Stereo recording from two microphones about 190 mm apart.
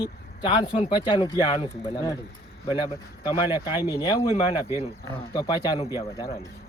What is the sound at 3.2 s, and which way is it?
Speech, 25° left (ahead or behind).